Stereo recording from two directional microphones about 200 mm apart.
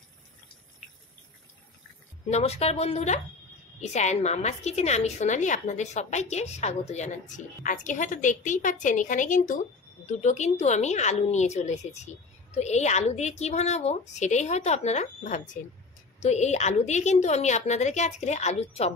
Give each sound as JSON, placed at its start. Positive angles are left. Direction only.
{"t": 2.3, "sound": "a woman's voice", "side_deg": 30}